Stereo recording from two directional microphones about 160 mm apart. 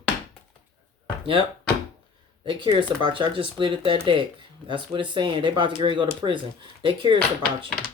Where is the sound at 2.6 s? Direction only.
30° right (ahead or behind).